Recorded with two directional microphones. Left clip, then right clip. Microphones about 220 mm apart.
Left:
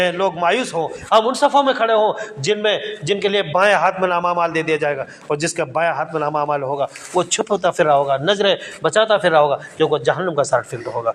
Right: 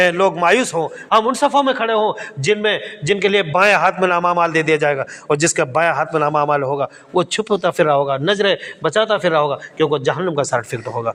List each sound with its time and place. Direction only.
0.0 s a man's voice: 50° right (ahead or behind)